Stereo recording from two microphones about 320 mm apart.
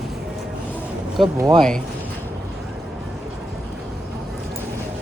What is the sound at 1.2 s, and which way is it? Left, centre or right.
Speech, centre.